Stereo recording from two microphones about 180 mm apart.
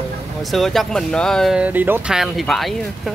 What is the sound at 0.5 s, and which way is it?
Speech, centre (ahead or behind).